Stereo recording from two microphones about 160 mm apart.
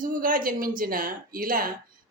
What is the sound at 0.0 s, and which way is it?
A woman's voice, 60° right (ahead or behind).